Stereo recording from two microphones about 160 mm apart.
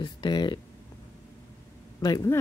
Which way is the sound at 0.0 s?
30° left (ahead or behind).